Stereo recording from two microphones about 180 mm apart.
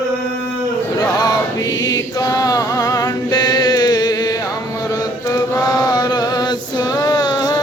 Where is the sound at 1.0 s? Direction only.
20° left (ahead or behind).